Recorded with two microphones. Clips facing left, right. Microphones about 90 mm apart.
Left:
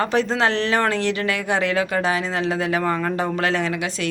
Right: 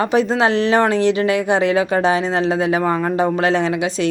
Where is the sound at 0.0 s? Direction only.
15° right (ahead or behind).